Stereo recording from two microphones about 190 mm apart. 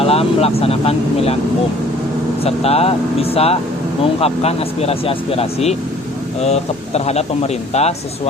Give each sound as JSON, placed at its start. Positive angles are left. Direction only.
{"t": 0.0, "sound": "speech", "side_deg": 30}
{"t": 2.4, "sound": "speech", "side_deg": 30}